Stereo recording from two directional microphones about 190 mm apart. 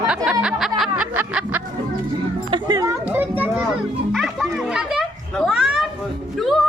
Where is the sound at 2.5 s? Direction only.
20° right (ahead or behind).